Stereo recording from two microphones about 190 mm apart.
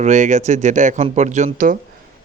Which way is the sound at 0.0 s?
40° right (ahead or behind).